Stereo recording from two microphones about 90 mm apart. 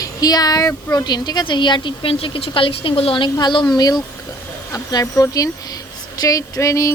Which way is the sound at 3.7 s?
45° left (ahead or behind).